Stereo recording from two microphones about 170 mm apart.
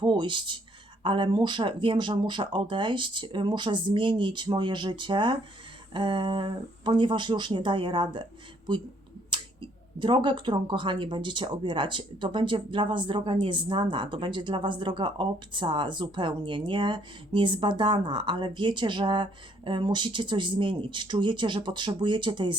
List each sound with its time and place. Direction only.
0.0 s speech: 30° right (ahead or behind)